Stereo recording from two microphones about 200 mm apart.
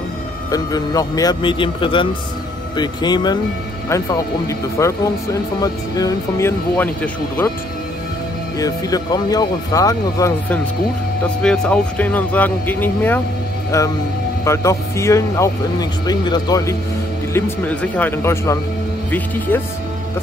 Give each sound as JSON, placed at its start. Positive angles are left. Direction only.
{"t": 0.5, "sound": "speech", "side_deg": 20}
{"t": 8.5, "sound": "speech", "side_deg": 20}
{"t": 11.4, "sound": "speech", "side_deg": 5}